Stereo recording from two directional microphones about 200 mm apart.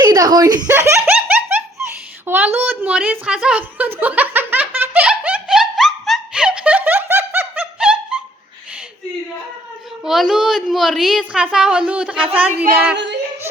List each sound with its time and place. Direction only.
0.0 s giggle: 20° right (ahead or behind)
2.2 s a woman's voice: 10° right (ahead or behind)
4.0 s giggle: 10° right (ahead or behind)
10.0 s a woman's voice: centre (ahead or behind)